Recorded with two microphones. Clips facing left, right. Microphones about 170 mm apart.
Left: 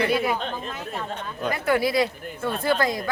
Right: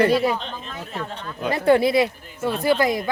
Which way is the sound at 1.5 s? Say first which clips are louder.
Right 6 dB; 30° right (ahead or behind).